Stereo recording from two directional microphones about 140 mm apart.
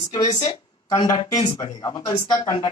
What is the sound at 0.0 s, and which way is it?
Speech, 30° left (ahead or behind).